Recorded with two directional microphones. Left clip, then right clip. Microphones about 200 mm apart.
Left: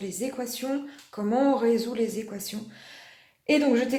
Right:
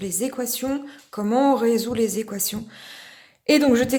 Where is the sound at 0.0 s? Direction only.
30° right (ahead or behind).